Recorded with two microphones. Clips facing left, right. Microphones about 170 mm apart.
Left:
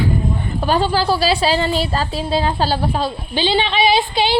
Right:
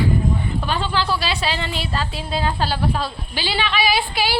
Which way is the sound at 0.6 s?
40° left (ahead or behind).